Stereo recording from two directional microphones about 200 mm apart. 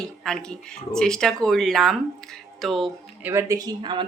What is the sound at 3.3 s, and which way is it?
Speech, 15° right (ahead or behind).